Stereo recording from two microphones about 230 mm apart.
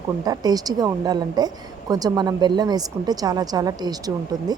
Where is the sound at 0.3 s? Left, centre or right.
Centre.